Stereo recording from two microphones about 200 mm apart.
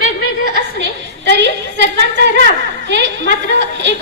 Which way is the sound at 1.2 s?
60° right (ahead or behind).